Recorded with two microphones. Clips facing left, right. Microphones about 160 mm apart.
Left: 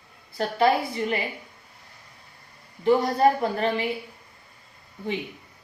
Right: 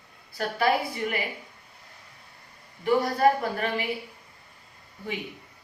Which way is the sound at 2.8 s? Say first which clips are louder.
Left 2 dB; 25° left (ahead or behind).